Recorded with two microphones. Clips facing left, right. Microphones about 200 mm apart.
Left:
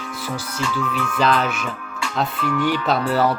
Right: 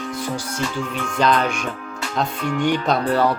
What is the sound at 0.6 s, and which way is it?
Speech, 40° right (ahead or behind).